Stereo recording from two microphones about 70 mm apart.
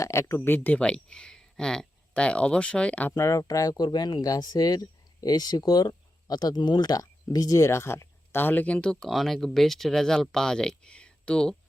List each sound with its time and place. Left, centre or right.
0.0 s speech: left
0.4 s speech: left
0.8 s speech: centre
3.2 s speech: left; by 11.5 s centre